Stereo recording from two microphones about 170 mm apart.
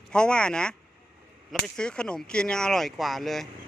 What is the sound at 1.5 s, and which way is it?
Speech, 5° left (ahead or behind).